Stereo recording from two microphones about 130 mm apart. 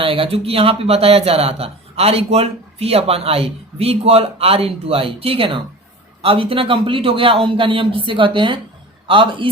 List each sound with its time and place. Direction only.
0.0 s a man's voice: 45° right (ahead or behind)